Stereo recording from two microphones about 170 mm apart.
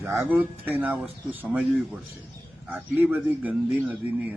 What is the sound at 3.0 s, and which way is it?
Speech, 10° right (ahead or behind).